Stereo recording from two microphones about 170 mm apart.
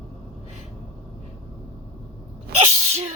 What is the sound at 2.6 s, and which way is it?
Sneeze, 40° right (ahead or behind).